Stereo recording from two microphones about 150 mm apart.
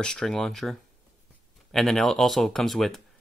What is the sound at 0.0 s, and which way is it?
Speech, 5° left (ahead or behind).